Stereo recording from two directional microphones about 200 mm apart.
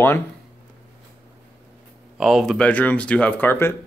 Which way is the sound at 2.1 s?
Centre (ahead or behind).